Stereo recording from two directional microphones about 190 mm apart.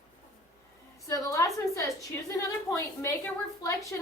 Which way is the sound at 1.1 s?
15° left (ahead or behind).